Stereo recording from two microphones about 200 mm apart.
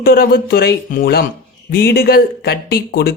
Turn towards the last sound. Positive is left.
turn(degrees=55)  # may be behind; listen again after turning